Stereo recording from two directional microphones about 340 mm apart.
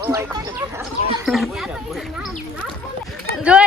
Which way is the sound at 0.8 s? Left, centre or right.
Centre.